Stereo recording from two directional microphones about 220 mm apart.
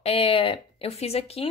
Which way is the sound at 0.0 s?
25° left (ahead or behind).